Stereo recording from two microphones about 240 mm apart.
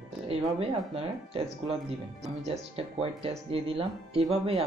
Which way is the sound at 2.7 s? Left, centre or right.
Right.